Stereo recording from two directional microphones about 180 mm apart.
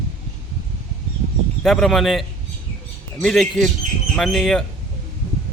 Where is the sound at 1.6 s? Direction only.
Centre (ahead or behind).